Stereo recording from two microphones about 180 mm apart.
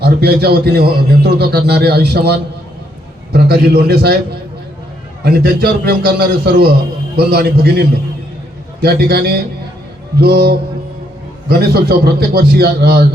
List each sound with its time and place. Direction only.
0.0 s a man's voice: 60° right (ahead or behind)
5.2 s a man's voice: 60° right (ahead or behind)